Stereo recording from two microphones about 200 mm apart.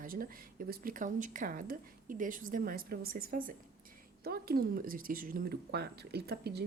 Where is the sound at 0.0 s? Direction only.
45° right (ahead or behind).